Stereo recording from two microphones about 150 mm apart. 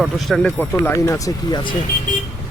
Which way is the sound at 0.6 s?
15° left (ahead or behind).